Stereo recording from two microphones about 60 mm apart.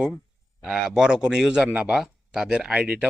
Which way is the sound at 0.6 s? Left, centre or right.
Centre.